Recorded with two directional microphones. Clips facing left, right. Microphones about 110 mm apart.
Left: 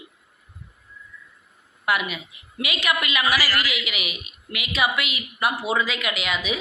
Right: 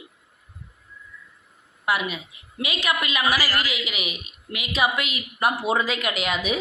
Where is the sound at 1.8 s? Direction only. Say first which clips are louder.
Even; 35° right (ahead or behind).